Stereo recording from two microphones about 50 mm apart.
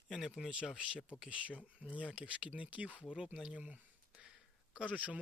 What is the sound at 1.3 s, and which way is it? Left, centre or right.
Speech, right.